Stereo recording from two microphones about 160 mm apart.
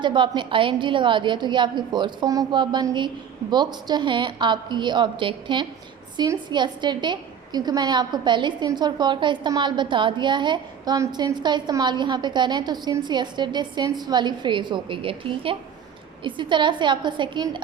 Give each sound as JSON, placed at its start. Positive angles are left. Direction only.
{"t": 0.0, "sound": "a woman's voice", "side_deg": -30}